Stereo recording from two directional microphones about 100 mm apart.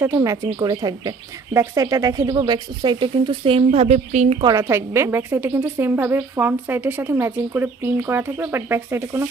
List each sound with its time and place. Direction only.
0.0 s a woman's voice: 30° right (ahead or behind)
0.6 s speech: 40° right (ahead or behind); by 4.4 s 90° right
4.7 s a woman's voice: 25° right (ahead or behind)